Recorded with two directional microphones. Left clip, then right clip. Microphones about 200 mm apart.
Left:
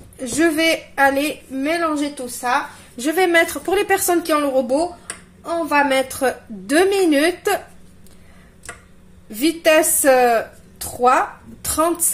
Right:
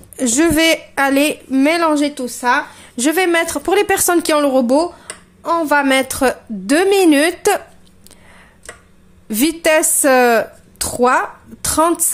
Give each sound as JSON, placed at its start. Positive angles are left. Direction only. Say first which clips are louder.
{"t": 0.2, "sound": "a woman's voice", "louder": "right 4 dB", "side_deg": -45}
{"t": 9.3, "sound": "a woman's voice", "louder": "right 1 dB", "side_deg": -50}